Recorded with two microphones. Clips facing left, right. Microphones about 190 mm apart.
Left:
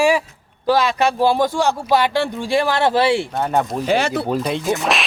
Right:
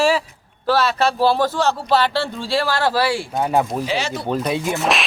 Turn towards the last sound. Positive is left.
turn(degrees=0)  # may be behind; listen again after turning